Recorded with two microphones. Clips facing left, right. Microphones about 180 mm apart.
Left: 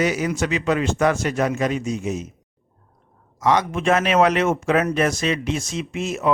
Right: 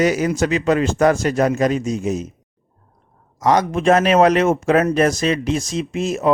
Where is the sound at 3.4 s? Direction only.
40° right (ahead or behind).